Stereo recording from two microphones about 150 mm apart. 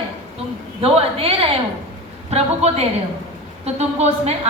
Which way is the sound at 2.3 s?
45° right (ahead or behind).